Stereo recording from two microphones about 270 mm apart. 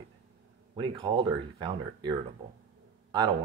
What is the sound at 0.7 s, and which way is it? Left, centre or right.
Speech, centre.